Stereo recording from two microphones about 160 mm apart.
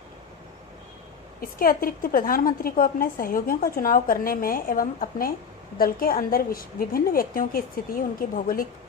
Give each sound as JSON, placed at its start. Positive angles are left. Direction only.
{"t": 1.4, "sound": "a woman's voice", "side_deg": 65}